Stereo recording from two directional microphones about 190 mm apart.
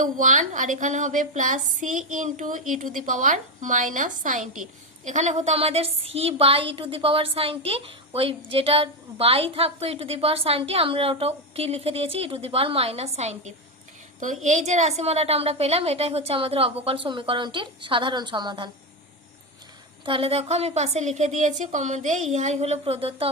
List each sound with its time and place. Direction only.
0.0 s a woman's voice: 40° right (ahead or behind); by 18.7 s 25° right (ahead or behind)
20.1 s a woman's voice: 30° right (ahead or behind)